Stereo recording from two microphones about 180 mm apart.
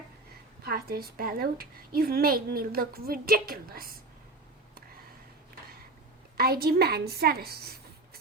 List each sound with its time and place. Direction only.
0.6 s a woman's voice: 55° right (ahead or behind)
6.3 s a woman's voice: 60° right (ahead or behind)